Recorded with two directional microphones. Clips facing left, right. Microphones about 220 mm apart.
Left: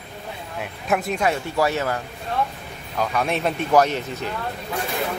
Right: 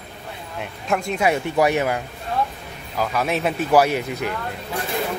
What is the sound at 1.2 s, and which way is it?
Speech, 15° right (ahead or behind).